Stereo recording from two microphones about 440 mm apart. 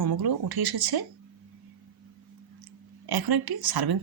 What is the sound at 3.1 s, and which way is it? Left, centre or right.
Speech, right.